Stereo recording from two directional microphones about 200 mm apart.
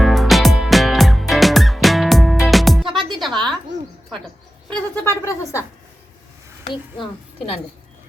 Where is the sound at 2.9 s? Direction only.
25° right (ahead or behind).